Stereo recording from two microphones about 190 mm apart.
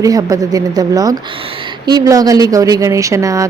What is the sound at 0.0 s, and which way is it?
A woman's voice, 20° right (ahead or behind).